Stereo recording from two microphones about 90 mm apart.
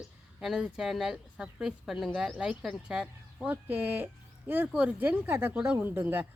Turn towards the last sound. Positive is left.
turn(degrees=-25)  # may be behind; listen again after turning